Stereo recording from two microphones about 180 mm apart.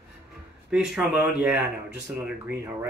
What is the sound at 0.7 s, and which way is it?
Speech, 5° right (ahead or behind).